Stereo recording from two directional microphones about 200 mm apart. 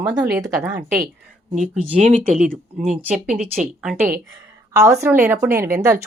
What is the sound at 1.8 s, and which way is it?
Speech, 35° right (ahead or behind).